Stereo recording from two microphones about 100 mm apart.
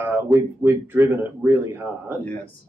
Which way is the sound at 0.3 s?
20° right (ahead or behind).